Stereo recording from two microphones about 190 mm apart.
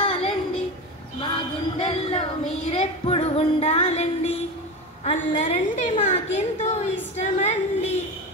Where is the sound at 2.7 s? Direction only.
30° left (ahead or behind).